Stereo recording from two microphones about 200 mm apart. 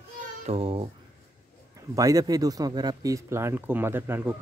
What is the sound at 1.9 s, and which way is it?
Speech, 15° right (ahead or behind).